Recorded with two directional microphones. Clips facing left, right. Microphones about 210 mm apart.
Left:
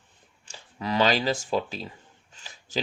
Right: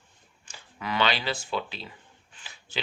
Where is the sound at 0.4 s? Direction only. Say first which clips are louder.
Left 3 dB; 35° left (ahead or behind).